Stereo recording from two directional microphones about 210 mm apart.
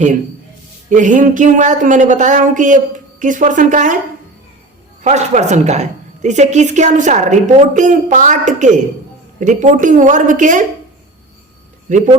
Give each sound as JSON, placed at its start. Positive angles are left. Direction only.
{"t": 0.9, "sound": "a woman's voice", "side_deg": -35}
{"t": 5.0, "sound": "a woman's voice", "side_deg": -35}